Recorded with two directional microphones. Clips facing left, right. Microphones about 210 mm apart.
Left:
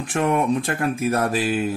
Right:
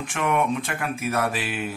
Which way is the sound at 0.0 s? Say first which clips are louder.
Left 3 dB; 35° left (ahead or behind).